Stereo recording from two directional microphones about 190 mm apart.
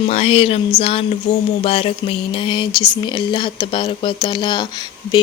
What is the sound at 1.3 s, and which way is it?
Speech, 70° left (ahead or behind).